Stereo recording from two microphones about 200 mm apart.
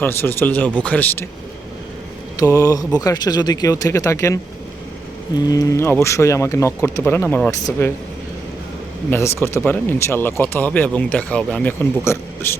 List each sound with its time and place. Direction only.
0.0 s speech: 10° left (ahead or behind)
2.3 s speech: 15° left (ahead or behind)
5.5 s speech: 15° left (ahead or behind)
9.0 s speech: 10° left (ahead or behind)